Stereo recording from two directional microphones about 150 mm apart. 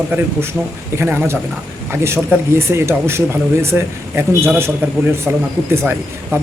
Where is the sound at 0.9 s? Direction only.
15° right (ahead or behind).